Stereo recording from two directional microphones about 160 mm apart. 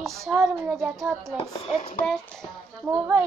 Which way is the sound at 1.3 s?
40° left (ahead or behind).